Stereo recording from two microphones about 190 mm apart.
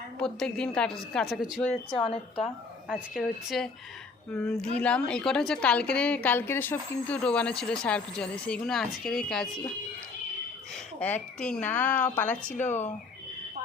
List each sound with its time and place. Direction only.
0.2 s speech: 5° left (ahead or behind)
1.9 s a woman's voice: 30° left (ahead or behind)
2.9 s speech: centre (ahead or behind)
11.0 s speech: 5° left (ahead or behind)